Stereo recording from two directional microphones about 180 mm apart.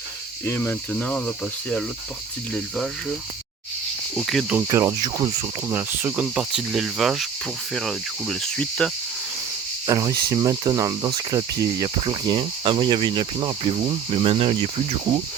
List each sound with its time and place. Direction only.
0.4 s speech: 10° left (ahead or behind)
2.5 s cricket: 5° left (ahead or behind)
4.1 s cricket: centre (ahead or behind)
4.7 s speech: 15° right (ahead or behind)
7.7 s cricket: centre (ahead or behind)
9.8 s cricket: 20° right (ahead or behind)